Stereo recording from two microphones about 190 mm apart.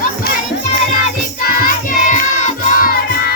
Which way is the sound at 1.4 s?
50° left (ahead or behind).